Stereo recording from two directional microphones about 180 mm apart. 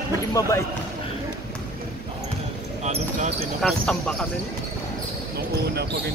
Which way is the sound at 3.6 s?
5° left (ahead or behind).